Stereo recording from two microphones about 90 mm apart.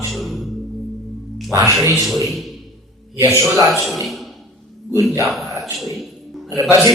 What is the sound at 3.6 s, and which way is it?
Speech, centre (ahead or behind).